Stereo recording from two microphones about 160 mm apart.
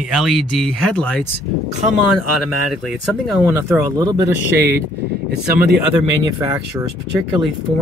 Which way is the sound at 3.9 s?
25° right (ahead or behind).